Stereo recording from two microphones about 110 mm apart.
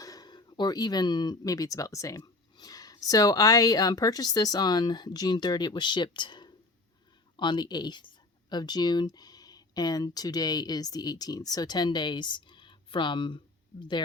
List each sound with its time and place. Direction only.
0.0 s speech: 35° left (ahead or behind)